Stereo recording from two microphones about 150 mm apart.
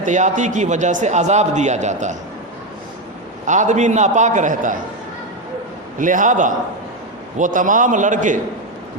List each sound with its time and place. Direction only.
0.0 s a man's voice: 55° right (ahead or behind)
3.4 s a man's voice: 55° right (ahead or behind)
6.0 s a man's voice: 60° right (ahead or behind)